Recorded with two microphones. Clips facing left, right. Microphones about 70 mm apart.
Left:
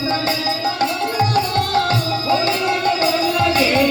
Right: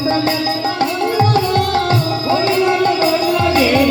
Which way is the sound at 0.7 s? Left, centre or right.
Right.